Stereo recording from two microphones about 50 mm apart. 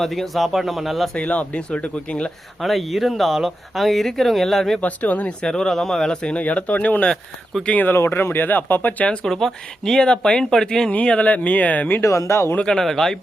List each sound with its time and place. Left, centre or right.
0.0 s speech: centre
1.1 s speech: left
2.6 s speech: centre
4.8 s speech: left
5.5 s speech: centre
6.3 s speech: left
7.1 s speech: centre
7.7 s speech: left
7.9 s speech: left
9.2 s speech: centre
10.9 s speech: left
12.0 s speech: left
12.6 s speech: centre